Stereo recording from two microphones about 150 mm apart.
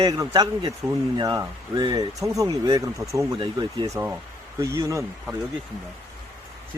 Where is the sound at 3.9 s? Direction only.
15° right (ahead or behind).